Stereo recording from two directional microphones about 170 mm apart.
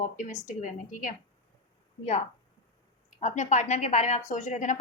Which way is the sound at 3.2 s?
45° left (ahead or behind).